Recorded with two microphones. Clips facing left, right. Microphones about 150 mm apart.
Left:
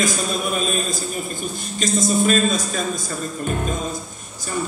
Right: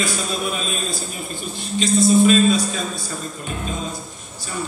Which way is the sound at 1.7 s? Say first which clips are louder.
Right 5 dB; 45° left (ahead or behind).